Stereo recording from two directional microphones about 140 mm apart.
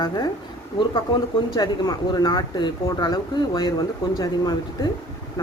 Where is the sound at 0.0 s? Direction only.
30° left (ahead or behind).